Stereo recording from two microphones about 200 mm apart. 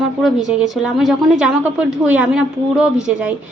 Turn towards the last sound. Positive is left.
turn(degrees=-5)  # may be behind; listen again after turning